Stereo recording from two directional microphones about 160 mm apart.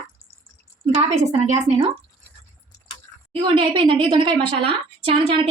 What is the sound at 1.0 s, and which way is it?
Speech, 45° right (ahead or behind).